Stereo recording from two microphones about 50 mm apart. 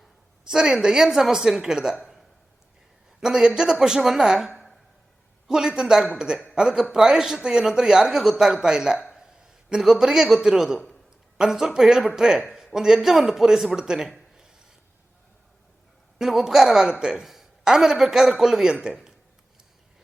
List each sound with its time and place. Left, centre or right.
0.5 s a man's voice: centre
3.2 s a man's voice: centre
9.1 s a sound: centre
10.2 s a man's voice: centre
14.1 s a sound: centre
16.1 s a man's voice: centre
17.2 s a man's voice: centre